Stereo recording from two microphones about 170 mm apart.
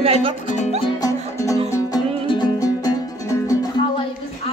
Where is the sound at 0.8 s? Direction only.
20° left (ahead or behind).